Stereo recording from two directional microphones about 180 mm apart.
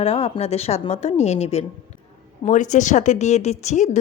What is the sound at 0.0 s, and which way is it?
A woman's voice, 35° left (ahead or behind).